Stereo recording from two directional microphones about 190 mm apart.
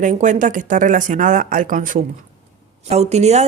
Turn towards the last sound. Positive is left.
turn(degrees=-35)  # may be behind; listen again after turning